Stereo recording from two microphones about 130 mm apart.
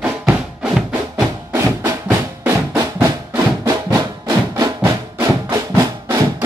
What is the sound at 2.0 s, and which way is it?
Music, 15° right (ahead or behind).